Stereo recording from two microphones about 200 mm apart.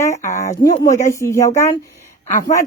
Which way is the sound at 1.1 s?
15° left (ahead or behind).